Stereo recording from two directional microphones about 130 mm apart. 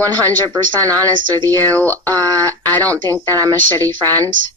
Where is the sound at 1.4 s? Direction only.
20° left (ahead or behind).